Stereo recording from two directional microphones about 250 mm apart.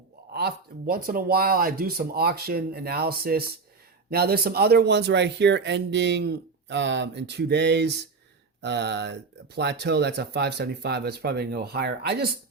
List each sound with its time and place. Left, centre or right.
0.3 s speech: right